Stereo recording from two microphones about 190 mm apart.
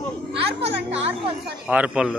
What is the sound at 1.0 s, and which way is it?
Speech, 30° right (ahead or behind).